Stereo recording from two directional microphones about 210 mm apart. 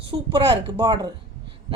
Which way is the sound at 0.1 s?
25° right (ahead or behind).